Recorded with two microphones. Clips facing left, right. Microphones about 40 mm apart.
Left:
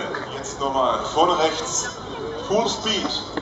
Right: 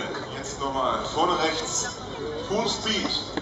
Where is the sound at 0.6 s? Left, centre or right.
Left.